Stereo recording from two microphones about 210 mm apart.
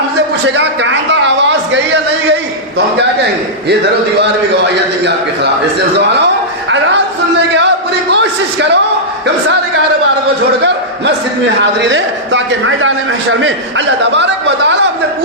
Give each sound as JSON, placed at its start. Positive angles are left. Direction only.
{"t": 0.4, "sound": "a sound", "side_deg": -60}
{"t": 8.1, "sound": "a man's voice", "side_deg": -55}
{"t": 11.9, "sound": "a man's voice", "side_deg": -60}